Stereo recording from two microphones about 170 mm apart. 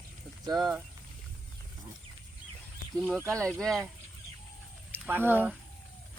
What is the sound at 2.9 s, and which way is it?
Speech, 5° left (ahead or behind).